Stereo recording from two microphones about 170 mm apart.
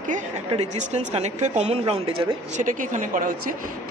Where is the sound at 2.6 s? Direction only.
50° right (ahead or behind).